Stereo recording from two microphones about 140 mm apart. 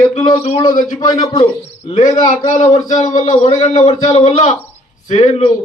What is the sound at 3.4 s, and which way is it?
A man's voice, 50° left (ahead or behind).